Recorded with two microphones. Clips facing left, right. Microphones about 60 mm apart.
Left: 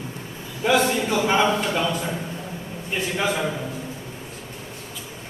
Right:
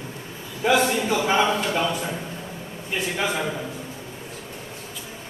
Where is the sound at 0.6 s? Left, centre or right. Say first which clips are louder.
Even; centre.